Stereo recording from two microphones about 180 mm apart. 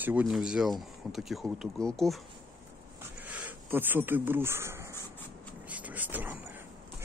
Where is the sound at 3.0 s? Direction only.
10° right (ahead or behind).